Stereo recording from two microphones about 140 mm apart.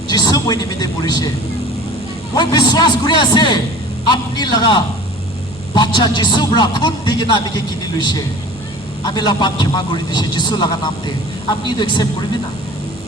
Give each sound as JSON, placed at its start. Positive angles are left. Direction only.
{"t": 0.1, "sound": "a man's voice", "side_deg": 25}
{"t": 2.3, "sound": "a man's voice", "side_deg": 30}